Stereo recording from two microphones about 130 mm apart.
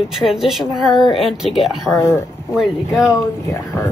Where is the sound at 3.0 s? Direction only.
25° left (ahead or behind).